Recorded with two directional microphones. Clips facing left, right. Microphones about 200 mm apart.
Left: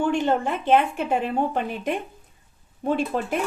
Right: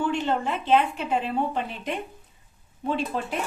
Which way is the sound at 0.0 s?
50° left (ahead or behind).